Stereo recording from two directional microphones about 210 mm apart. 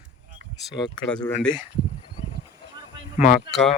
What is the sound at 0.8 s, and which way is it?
Speech, 20° left (ahead or behind).